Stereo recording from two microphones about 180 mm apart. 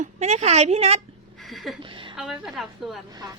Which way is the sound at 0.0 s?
40° right (ahead or behind).